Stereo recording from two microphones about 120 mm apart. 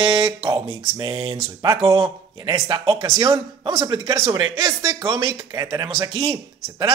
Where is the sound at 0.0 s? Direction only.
40° right (ahead or behind).